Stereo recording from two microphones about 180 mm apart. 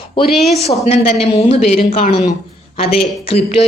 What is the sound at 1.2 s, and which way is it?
Speech, 35° left (ahead or behind).